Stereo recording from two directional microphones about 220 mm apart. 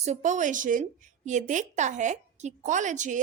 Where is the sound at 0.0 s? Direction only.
35° right (ahead or behind).